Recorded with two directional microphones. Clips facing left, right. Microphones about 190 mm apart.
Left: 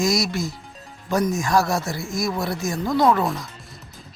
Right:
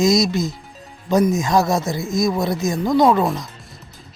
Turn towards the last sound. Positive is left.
turn(degrees=-20)  # may be behind; listen again after turning